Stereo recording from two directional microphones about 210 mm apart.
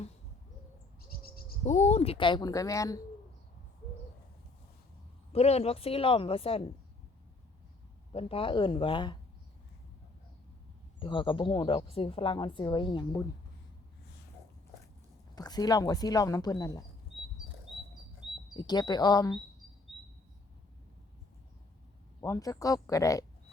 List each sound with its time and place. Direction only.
1.2 s speech: 40° left (ahead or behind); by 3.0 s 15° left (ahead or behind)
5.3 s a woman's voice: 30° left (ahead or behind)
8.1 s a woman's voice: 25° left (ahead or behind)
11.0 s a woman's voice: 25° left (ahead or behind)
15.4 s speech: 20° left (ahead or behind)
18.5 s a woman's voice: 20° left (ahead or behind)
22.2 s speech: 15° left (ahead or behind)